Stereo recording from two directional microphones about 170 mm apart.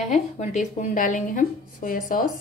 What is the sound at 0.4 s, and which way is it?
A woman's voice, 45° left (ahead or behind).